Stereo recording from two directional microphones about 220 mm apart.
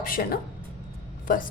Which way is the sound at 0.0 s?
40° left (ahead or behind).